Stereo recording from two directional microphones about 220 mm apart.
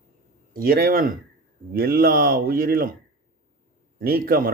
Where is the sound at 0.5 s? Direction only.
40° right (ahead or behind).